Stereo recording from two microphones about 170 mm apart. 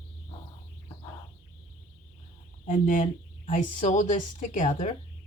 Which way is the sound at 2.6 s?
50° left (ahead or behind).